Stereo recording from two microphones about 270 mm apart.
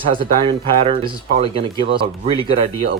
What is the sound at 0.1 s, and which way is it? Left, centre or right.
Speech, centre.